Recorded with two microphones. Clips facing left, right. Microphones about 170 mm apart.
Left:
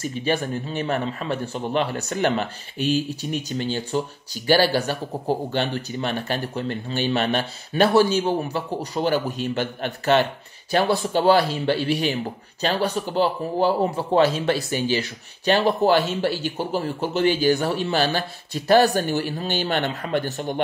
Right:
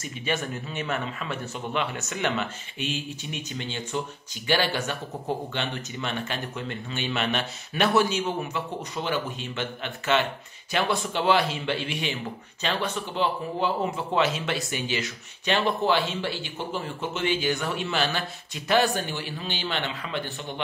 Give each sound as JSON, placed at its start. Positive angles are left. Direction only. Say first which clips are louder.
{"t": 0.0, "sound": "a man's voice", "louder": "left 6 dB", "side_deg": 35}